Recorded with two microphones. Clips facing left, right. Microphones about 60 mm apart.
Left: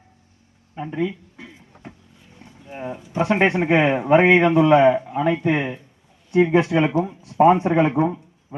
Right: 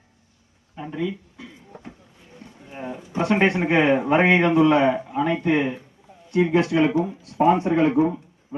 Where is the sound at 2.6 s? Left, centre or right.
Centre.